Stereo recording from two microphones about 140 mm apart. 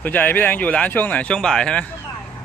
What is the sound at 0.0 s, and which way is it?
Speech, 10° left (ahead or behind).